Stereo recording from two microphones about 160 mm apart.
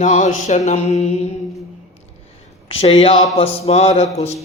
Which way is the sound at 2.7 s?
40° left (ahead or behind).